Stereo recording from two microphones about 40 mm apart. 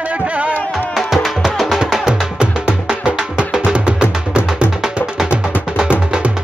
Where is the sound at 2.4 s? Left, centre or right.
Right.